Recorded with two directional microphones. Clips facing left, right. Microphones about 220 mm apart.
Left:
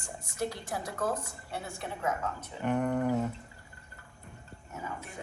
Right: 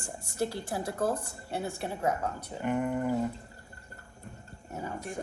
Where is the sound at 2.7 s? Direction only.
5° right (ahead or behind).